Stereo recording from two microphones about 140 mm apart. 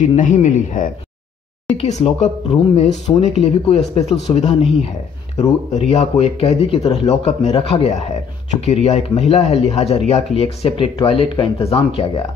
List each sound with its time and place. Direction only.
0.1 s a man's voice: 60° left (ahead or behind)